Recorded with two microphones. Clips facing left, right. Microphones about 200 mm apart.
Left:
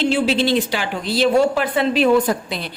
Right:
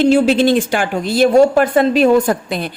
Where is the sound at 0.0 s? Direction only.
45° right (ahead or behind).